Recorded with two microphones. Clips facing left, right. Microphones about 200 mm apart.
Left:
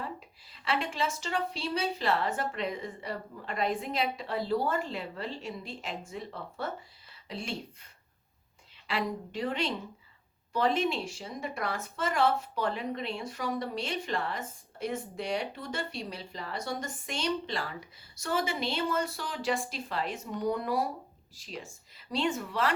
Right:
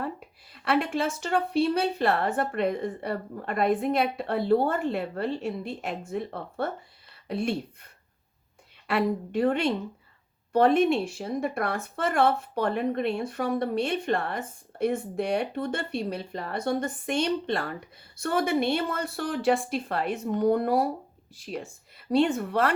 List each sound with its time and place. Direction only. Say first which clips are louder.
0.0 s speech: right 6 dB; 55° right (ahead or behind)
8.9 s speech: right 7 dB; 55° right (ahead or behind)